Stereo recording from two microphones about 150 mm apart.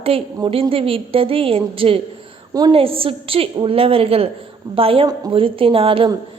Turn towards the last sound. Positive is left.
turn(degrees=-35)  # may be behind; listen again after turning